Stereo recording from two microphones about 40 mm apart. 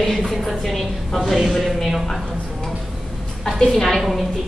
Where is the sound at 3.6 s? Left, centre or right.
Centre.